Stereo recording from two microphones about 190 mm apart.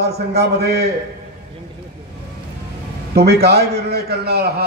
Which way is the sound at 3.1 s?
60° right (ahead or behind).